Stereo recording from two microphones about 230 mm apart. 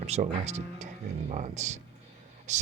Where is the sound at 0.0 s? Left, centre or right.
Right.